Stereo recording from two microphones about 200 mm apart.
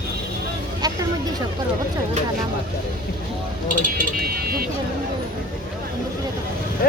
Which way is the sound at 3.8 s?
45° right (ahead or behind).